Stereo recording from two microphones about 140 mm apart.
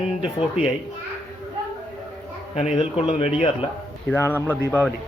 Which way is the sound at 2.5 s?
50° left (ahead or behind).